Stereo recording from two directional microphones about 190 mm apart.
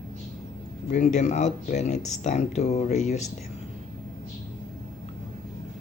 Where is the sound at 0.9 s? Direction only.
40° left (ahead or behind).